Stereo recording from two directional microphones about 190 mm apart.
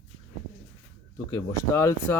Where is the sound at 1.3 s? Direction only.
15° left (ahead or behind).